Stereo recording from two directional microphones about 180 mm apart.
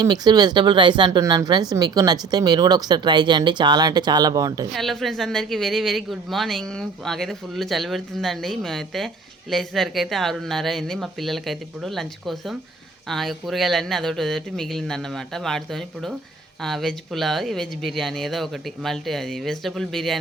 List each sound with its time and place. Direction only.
0.0 s speech: 25° right (ahead or behind)
4.7 s speech: centre (ahead or behind)